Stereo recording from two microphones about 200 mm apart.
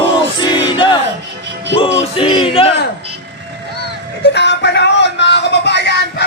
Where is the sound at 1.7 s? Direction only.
25° left (ahead or behind).